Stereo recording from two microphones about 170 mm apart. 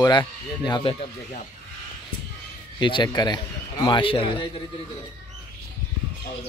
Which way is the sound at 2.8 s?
25° left (ahead or behind).